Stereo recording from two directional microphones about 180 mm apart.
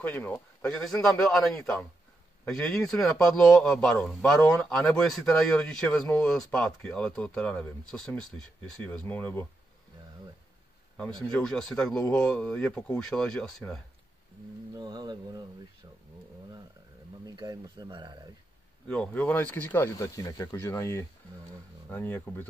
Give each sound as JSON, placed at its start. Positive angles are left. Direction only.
{"t": 0.0, "sound": "speech", "side_deg": 10}
{"t": 2.4, "sound": "speech", "side_deg": 0}
{"t": 11.0, "sound": "speech", "side_deg": 5}
{"t": 14.8, "sound": "speech", "side_deg": -25}
{"t": 17.3, "sound": "speech", "side_deg": -25}
{"t": 18.9, "sound": "speech", "side_deg": 10}